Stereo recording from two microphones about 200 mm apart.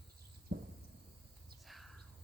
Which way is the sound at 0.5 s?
55° right (ahead or behind).